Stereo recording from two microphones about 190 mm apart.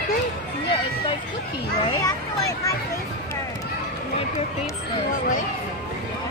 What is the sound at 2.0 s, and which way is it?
Speech, 15° left (ahead or behind).